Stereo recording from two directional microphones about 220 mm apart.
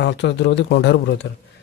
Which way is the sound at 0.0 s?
55° left (ahead or behind).